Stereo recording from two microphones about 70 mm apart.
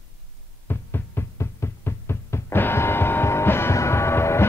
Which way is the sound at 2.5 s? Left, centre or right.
Left.